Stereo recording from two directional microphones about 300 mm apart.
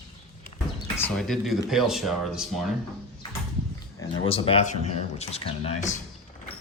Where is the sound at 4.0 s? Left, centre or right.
Centre.